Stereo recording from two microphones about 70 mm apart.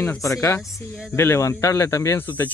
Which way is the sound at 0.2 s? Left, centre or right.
Left.